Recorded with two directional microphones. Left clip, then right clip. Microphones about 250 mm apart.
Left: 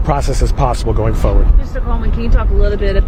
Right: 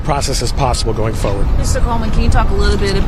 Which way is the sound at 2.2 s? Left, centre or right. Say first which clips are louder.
Even; right.